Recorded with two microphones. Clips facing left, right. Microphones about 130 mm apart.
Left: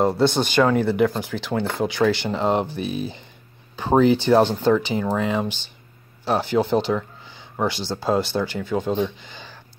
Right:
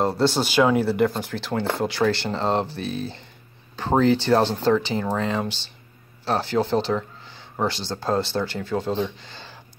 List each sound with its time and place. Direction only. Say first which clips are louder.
0.0 s speech: left 2 dB; centre (ahead or behind)
2.2 s speech: left 2 dB; 10° left (ahead or behind)
6.9 s a sound: left 1 dB; centre (ahead or behind)
7.9 s speech: left 2 dB; 5° left (ahead or behind)